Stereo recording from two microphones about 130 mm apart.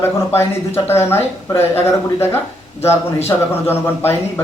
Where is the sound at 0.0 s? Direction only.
20° left (ahead or behind).